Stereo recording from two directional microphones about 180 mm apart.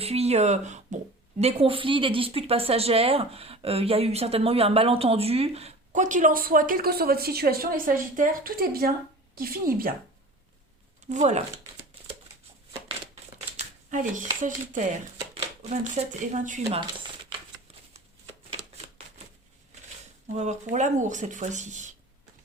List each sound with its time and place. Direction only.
0.0 s a woman's voice: 35° right (ahead or behind); by 9.9 s 55° right (ahead or behind)
11.1 s a woman's voice: 40° right (ahead or behind)
13.6 s a sound: 45° right (ahead or behind)
14.4 s a woman's voice: 45° right (ahead or behind)
20.3 s a woman's voice: 40° right (ahead or behind)